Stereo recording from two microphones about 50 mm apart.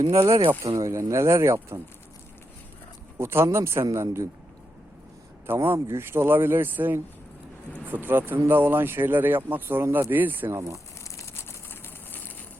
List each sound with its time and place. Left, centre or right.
0.1 s speech: right
0.7 s speech: right
3.2 s a man's voice: right
5.6 s speech: right
10.5 s speech: right
11.7 s a sound: left